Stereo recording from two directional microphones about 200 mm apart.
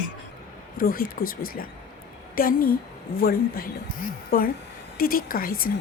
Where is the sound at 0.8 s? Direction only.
45° left (ahead or behind).